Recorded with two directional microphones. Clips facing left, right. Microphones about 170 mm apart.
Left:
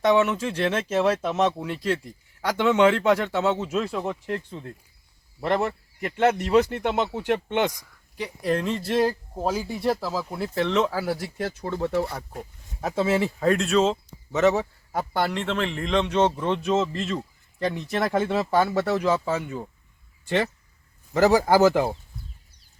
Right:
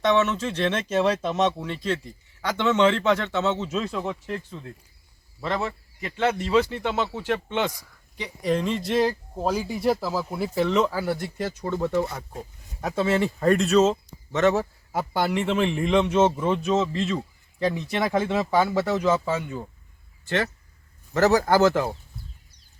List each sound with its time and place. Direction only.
0.0 s speech: 10° left (ahead or behind)
5.4 s speech: 55° left (ahead or behind)
6.9 s speech: 15° left (ahead or behind)
8.1 s speech: 5° left (ahead or behind)
20.2 s speech: 15° left (ahead or behind)